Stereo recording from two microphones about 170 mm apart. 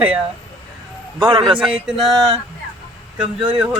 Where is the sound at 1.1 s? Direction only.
30° right (ahead or behind).